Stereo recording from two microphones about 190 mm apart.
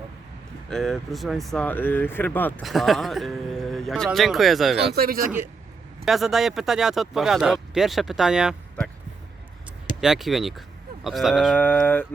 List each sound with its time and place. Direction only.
0.7 s speech: centre (ahead or behind)
4.9 s speech: 50° right (ahead or behind)
6.1 s speech: centre (ahead or behind)
10.0 s speech: centre (ahead or behind)